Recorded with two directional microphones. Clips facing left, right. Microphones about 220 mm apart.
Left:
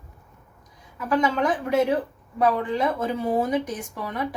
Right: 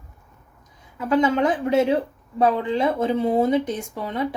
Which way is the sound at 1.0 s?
25° right (ahead or behind).